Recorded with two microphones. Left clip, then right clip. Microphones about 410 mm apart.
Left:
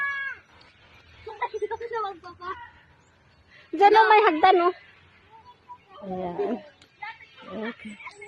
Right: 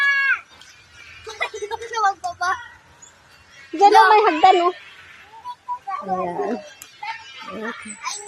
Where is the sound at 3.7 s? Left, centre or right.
Left.